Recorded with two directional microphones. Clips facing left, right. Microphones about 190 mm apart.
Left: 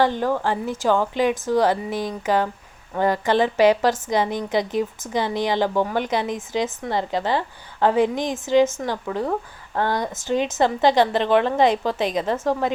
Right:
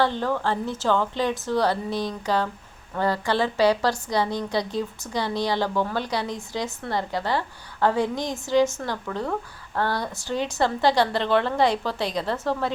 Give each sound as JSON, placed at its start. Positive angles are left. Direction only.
{"t": 0.0, "sound": "a woman's voice", "side_deg": 15}